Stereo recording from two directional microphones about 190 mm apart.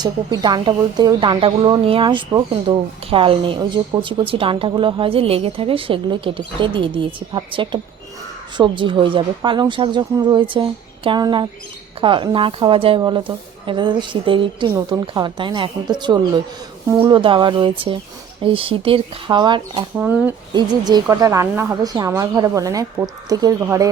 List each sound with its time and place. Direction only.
0.0 s speech: 25° right (ahead or behind)
20.0 s a woman's voice: 10° right (ahead or behind)
20.5 s a woman's voice: 20° right (ahead or behind)